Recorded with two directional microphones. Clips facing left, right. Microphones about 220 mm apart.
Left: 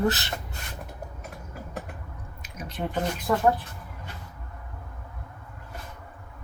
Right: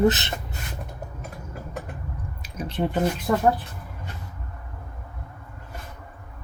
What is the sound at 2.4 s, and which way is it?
Squish, 30° right (ahead or behind).